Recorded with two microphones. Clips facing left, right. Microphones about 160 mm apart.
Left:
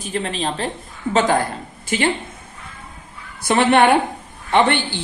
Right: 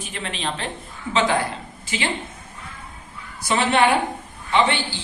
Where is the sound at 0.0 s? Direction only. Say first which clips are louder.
Left 6 dB; 40° left (ahead or behind).